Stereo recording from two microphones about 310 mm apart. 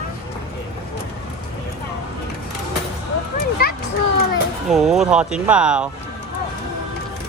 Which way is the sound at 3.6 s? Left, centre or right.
Left.